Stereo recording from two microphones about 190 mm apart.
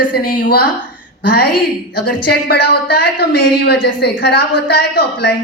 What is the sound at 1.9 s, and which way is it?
A woman's voice, 55° left (ahead or behind).